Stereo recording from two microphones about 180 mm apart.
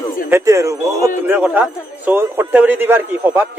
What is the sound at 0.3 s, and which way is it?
A man's voice, 15° right (ahead or behind).